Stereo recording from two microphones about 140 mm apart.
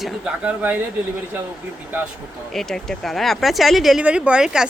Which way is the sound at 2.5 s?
5° left (ahead or behind).